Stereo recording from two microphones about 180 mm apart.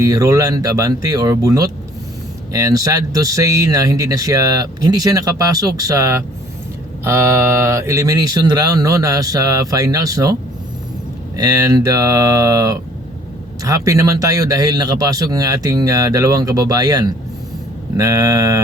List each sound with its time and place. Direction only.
0.0 s speech: 20° right (ahead or behind)
11.3 s speech: 20° right (ahead or behind)
17.9 s a sound: 20° right (ahead or behind)